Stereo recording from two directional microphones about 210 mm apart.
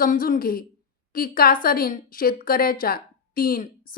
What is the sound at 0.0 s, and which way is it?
A woman's voice, 40° left (ahead or behind).